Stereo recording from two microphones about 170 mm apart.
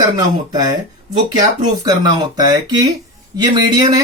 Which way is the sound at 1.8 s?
25° right (ahead or behind).